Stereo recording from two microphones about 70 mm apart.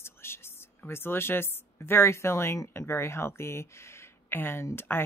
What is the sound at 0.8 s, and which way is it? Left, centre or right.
A woman's voice, left.